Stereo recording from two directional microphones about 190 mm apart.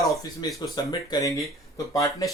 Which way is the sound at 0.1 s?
20° left (ahead or behind).